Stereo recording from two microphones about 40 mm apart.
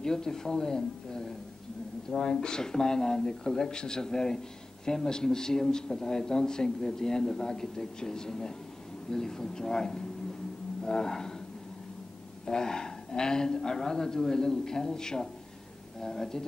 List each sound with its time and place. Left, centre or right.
0.0 s a man's voice: centre
10.8 s a sound: centre
12.4 s a man's voice: centre